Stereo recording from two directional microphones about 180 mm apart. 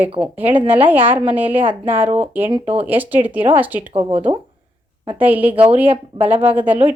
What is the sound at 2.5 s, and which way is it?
Speech, 35° right (ahead or behind).